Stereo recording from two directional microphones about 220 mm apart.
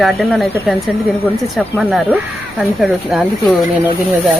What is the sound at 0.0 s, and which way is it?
Speech, centre (ahead or behind).